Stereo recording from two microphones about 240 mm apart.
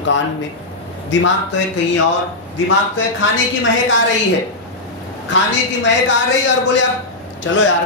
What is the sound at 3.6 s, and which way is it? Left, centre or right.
Speech, left.